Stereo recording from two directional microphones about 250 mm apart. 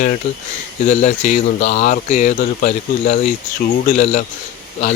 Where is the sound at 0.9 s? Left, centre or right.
Left.